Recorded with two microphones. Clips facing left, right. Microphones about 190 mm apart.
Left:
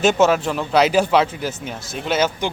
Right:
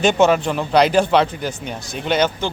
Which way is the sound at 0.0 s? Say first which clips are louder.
Right 1 dB; 5° left (ahead or behind).